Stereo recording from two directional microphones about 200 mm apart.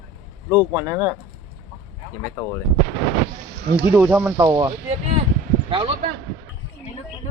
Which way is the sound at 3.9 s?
10° right (ahead or behind).